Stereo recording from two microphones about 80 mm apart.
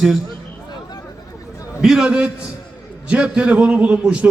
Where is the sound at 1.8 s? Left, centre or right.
Centre.